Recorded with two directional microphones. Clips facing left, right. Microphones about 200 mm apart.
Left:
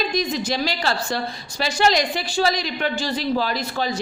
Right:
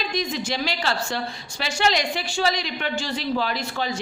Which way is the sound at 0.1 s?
40° left (ahead or behind).